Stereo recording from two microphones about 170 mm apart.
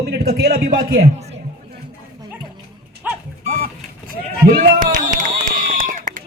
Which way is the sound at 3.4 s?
55° right (ahead or behind).